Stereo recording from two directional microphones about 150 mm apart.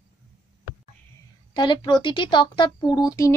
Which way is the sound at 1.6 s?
30° left (ahead or behind).